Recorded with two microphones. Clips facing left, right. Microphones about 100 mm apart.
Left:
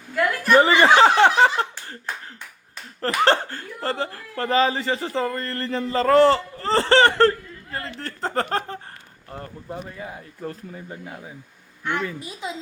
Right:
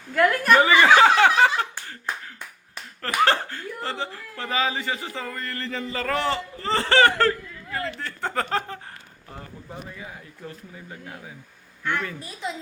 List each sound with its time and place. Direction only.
0.5 s speech: 35° left (ahead or behind)
3.0 s speech: 35° left (ahead or behind)
10.9 s speech: 10° left (ahead or behind)
11.8 s a woman's voice: 20° left (ahead or behind)